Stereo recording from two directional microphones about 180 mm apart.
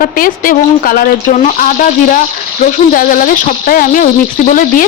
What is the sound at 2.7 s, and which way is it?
Speech, 50° left (ahead or behind).